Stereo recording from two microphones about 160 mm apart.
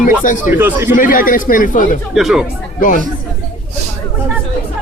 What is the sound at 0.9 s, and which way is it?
Speech, 60° left (ahead or behind).